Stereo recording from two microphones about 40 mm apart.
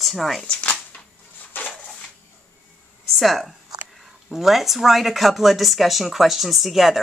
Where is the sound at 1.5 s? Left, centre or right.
Left.